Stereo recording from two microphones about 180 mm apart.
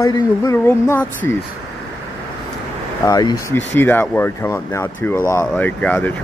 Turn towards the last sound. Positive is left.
turn(degrees=10)  # may be behind; listen again after turning